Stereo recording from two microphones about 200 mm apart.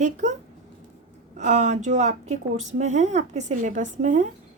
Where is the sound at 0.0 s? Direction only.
35° right (ahead or behind).